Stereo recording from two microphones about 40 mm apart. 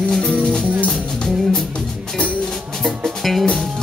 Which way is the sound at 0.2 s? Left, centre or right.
Centre.